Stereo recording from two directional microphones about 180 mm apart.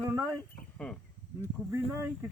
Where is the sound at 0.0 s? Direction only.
20° right (ahead or behind).